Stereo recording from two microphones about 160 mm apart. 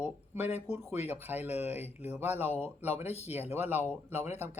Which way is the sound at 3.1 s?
40° left (ahead or behind).